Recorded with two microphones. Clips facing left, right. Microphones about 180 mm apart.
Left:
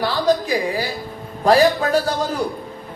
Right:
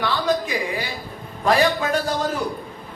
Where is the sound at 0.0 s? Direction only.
35° left (ahead or behind).